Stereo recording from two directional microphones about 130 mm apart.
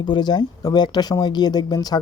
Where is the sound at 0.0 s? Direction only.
35° left (ahead or behind).